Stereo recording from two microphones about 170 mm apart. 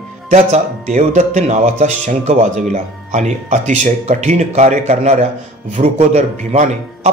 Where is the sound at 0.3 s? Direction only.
40° right (ahead or behind).